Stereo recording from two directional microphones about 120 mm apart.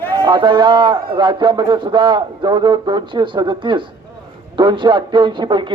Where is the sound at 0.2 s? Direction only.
40° right (ahead or behind).